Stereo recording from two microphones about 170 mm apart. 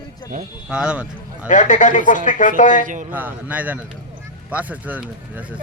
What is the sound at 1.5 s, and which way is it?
A man's voice, 50° left (ahead or behind).